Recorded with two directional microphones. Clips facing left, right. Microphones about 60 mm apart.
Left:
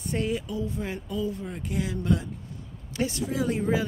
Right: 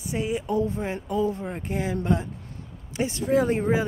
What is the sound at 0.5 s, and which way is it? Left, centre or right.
A woman's voice, right.